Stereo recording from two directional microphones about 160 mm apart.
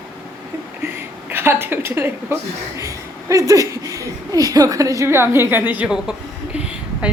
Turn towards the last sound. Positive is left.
turn(degrees=-5)  # may be behind; listen again after turning